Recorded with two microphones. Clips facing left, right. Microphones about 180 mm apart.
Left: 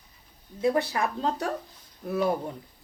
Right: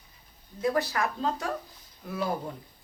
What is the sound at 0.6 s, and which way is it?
Speech, 25° left (ahead or behind).